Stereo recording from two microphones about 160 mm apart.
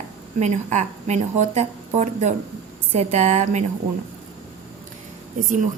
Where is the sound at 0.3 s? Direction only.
45° right (ahead or behind).